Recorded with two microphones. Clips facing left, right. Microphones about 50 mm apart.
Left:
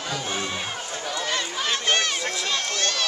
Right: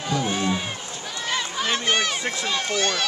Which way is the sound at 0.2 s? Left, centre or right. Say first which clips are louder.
Right 4 dB; centre.